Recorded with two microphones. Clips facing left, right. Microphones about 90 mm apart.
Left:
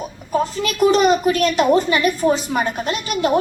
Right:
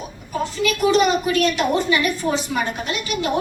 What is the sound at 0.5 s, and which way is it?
A child's voice, 40° left (ahead or behind).